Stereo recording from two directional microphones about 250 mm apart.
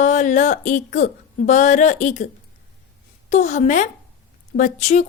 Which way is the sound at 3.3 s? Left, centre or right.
Left.